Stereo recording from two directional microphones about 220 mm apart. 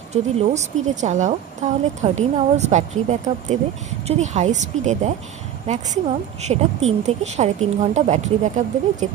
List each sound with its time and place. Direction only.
0.1 s a woman's voice: 30° right (ahead or behind)